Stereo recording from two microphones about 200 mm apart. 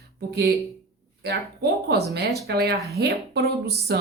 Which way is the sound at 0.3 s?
50° right (ahead or behind).